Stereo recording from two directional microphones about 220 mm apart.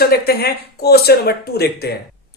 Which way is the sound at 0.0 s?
45° left (ahead or behind).